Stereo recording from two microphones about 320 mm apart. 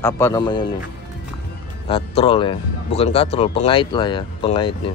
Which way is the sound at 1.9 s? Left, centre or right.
Centre.